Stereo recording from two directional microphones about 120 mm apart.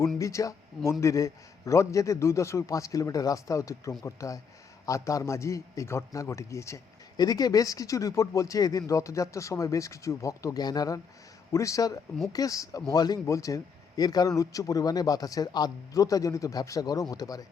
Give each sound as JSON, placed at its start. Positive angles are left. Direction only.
{"t": 0.2, "sound": "a man's voice", "side_deg": 25}